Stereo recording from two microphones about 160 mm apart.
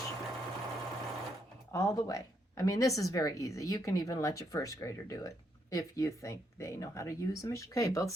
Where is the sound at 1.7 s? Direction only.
20° left (ahead or behind).